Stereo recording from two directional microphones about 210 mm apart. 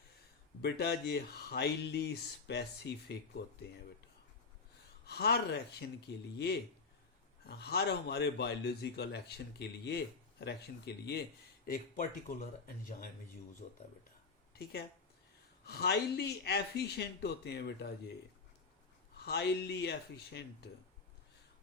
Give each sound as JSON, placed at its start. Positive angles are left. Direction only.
{"t": 0.6, "sound": "speech", "side_deg": 50}
{"t": 5.0, "sound": "speech", "side_deg": 50}
{"t": 7.4, "sound": "speech", "side_deg": 50}
{"t": 14.5, "sound": "speech", "side_deg": 50}
{"t": 19.1, "sound": "speech", "side_deg": 50}